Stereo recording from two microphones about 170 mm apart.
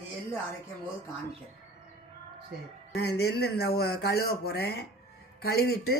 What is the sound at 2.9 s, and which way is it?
Speech, 70° left (ahead or behind).